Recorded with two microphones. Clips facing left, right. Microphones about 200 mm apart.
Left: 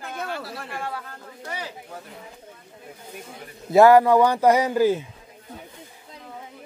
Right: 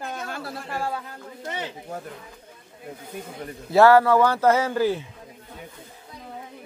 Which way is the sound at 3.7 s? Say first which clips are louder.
Left 2 dB; 15° left (ahead or behind).